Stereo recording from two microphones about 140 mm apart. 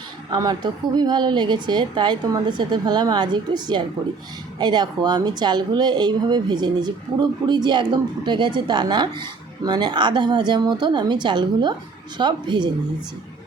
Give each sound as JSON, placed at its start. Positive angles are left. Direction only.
{"t": 0.3, "sound": "speech", "side_deg": -30}